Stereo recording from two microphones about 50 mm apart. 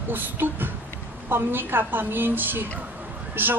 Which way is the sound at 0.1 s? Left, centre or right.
Right.